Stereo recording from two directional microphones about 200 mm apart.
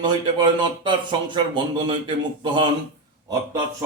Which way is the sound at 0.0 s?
20° right (ahead or behind).